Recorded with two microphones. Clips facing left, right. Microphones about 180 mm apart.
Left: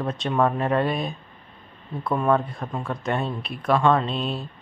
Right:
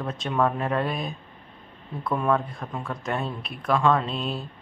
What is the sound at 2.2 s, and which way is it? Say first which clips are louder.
Speech: left 3 dB; centre (ahead or behind).